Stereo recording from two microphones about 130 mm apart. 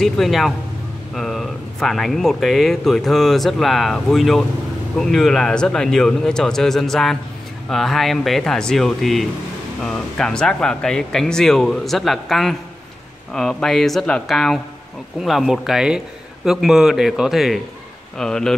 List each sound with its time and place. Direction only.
0.0 s speech: centre (ahead or behind)